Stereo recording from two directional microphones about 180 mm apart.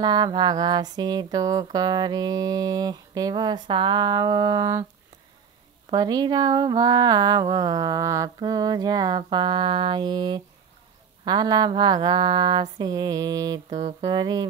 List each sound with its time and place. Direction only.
0.0 s music: 25° right (ahead or behind)
5.9 s music: 20° right (ahead or behind)